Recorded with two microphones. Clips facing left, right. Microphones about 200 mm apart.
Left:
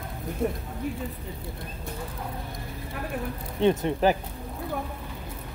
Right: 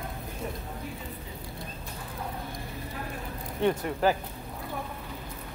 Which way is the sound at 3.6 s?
20° left (ahead or behind).